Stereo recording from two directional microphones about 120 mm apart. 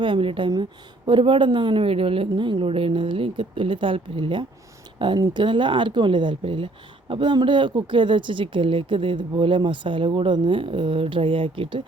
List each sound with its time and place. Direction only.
0.0 s speech: 45° right (ahead or behind)